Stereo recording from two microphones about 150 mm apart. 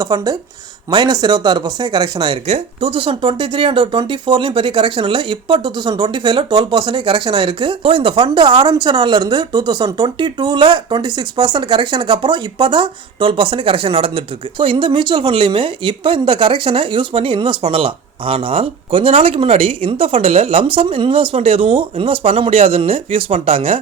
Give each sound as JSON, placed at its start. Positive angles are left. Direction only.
{"t": 0.0, "sound": "speech", "side_deg": -25}